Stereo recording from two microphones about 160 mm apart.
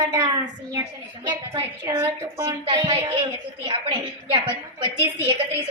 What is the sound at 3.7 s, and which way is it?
Speech, 35° right (ahead or behind).